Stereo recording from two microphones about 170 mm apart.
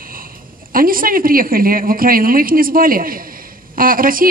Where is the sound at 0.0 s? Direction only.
55° right (ahead or behind).